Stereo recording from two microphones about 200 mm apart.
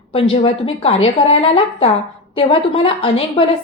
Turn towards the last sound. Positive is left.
turn(degrees=25)  # may be behind; listen again after turning